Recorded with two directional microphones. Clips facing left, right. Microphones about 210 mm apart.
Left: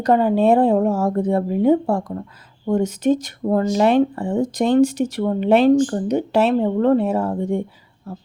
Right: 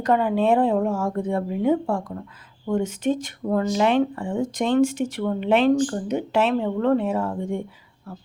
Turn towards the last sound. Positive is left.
turn(degrees=35)  # may be behind; listen again after turning